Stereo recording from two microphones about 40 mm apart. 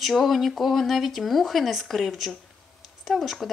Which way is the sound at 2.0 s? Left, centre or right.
Centre.